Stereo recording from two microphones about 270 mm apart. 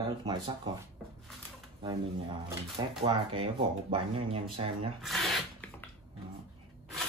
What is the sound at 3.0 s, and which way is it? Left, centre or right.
Speech, centre.